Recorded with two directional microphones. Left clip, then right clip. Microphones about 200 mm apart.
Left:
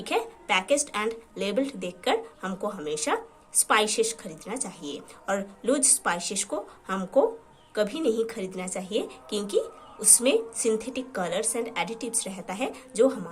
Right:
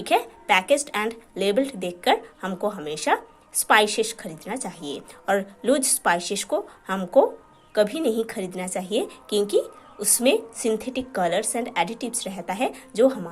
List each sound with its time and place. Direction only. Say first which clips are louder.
0.0 s a woman's voice: right 6 dB; 25° right (ahead or behind)